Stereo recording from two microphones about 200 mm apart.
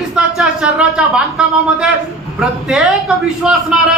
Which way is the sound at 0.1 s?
5° right (ahead or behind).